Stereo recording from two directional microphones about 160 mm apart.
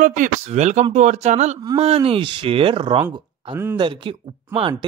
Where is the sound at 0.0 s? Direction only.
55° right (ahead or behind).